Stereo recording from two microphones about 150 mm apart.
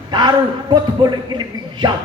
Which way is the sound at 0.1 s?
30° right (ahead or behind).